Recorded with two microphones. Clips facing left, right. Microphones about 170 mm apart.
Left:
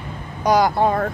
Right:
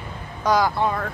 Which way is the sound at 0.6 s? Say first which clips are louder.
Left 6 dB; 40° left (ahead or behind).